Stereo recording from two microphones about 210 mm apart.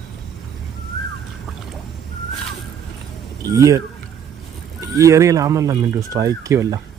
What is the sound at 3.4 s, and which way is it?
Speech, 15° right (ahead or behind).